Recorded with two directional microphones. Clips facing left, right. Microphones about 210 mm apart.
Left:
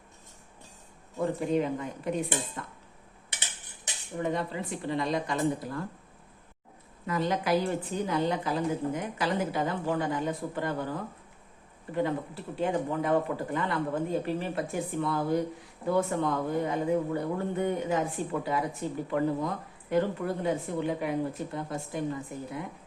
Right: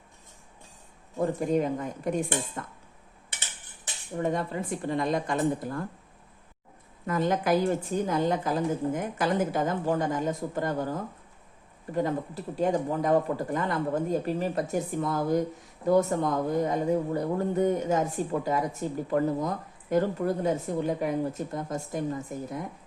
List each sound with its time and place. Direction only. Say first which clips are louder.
1.2 s a woman's voice: right 2 dB; 45° right (ahead or behind)
4.2 s a woman's voice: right 2 dB; 45° right (ahead or behind)
7.1 s a woman's voice: right 2 dB; 50° right (ahead or behind)